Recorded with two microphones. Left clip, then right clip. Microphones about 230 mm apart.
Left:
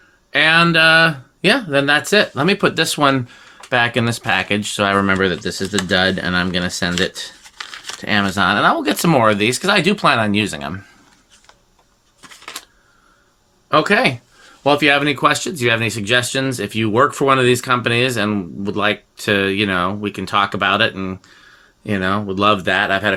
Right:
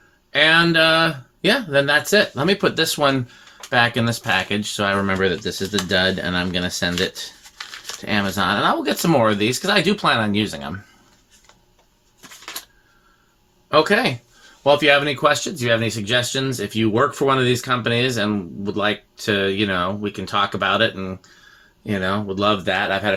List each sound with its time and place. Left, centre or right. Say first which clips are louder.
0.3 s speech: left 2 dB; left
7.6 s a sound: left 3 dB; left
8.0 s speech: left 4 dB; left
13.7 s speech: left 2 dB; left